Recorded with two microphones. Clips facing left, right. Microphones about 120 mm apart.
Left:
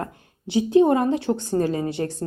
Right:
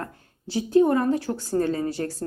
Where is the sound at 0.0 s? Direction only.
20° left (ahead or behind).